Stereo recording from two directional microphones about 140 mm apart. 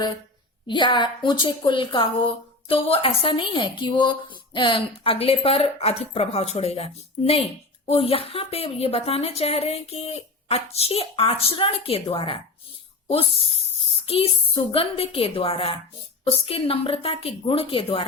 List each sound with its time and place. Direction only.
0.7 s a woman's voice: 35° left (ahead or behind)